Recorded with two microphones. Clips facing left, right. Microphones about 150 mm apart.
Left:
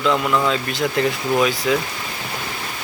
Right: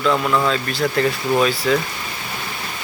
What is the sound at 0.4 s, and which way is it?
Speech, 20° left (ahead or behind).